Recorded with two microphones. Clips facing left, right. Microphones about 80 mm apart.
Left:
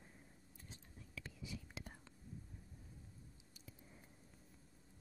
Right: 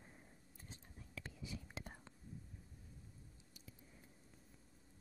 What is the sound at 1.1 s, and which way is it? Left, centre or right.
Whispering, right.